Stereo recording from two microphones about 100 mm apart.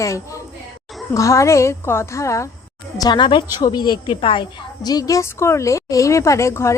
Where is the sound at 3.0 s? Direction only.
50° left (ahead or behind).